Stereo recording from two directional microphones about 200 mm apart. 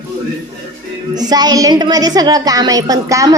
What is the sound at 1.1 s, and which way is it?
A woman's voice, 20° right (ahead or behind).